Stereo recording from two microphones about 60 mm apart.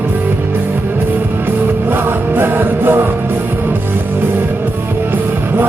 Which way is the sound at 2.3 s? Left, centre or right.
Right.